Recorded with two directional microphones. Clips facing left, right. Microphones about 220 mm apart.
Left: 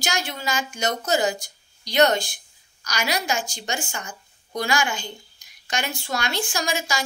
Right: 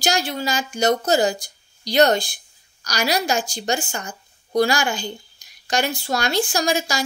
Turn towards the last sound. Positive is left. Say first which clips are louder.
# right 5 dB
turn(degrees=-40)  # may be behind; listen again after turning